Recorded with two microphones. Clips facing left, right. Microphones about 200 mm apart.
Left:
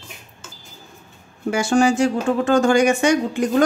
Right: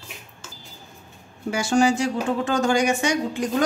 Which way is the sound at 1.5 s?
55° left (ahead or behind).